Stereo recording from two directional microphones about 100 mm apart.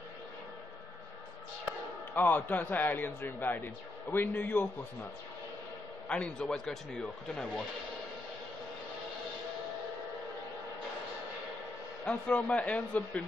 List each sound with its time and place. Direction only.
2.1 s a man's voice: 20° left (ahead or behind)
6.0 s speech: 10° left (ahead or behind)
12.0 s speech: 15° left (ahead or behind)